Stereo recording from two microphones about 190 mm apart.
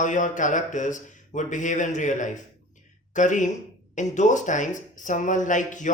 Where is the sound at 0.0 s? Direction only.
40° left (ahead or behind).